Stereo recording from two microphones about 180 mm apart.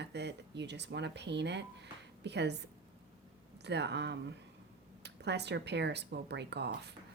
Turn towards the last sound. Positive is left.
turn(degrees=-70)  # may be behind; listen again after turning